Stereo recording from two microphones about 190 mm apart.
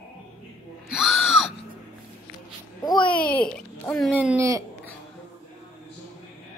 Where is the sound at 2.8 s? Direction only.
20° left (ahead or behind).